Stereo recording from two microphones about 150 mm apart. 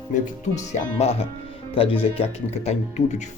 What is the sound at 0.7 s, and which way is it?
Speech, 45° left (ahead or behind).